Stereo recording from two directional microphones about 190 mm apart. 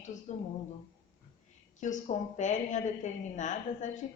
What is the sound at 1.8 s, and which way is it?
A woman's voice, 40° left (ahead or behind).